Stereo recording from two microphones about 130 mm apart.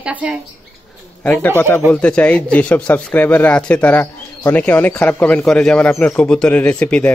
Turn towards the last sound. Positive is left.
turn(degrees=10)  # may be behind; listen again after turning